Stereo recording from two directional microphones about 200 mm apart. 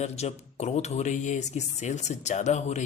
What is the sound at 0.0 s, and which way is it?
Speech, 35° left (ahead or behind).